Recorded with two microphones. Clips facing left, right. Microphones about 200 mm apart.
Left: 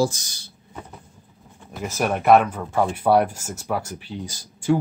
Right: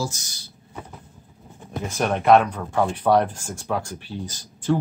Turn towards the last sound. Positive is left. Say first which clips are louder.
# left 2 dB
turn(degrees=10)  # may be behind; listen again after turning